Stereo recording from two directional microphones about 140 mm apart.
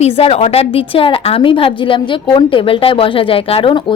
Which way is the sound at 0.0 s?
45° left (ahead or behind).